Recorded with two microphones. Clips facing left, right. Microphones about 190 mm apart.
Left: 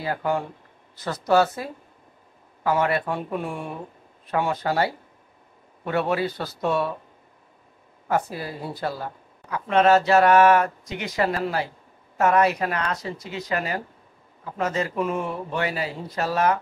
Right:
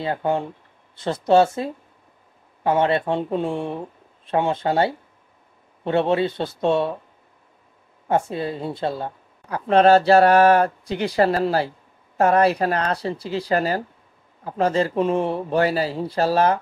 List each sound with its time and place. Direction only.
0.0 s speech: 25° right (ahead or behind)
8.1 s speech: 25° right (ahead or behind)